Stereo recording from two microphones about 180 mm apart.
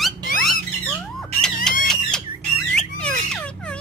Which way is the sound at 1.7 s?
5° left (ahead or behind).